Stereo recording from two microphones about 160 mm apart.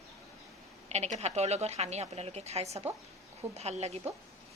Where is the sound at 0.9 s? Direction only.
45° right (ahead or behind).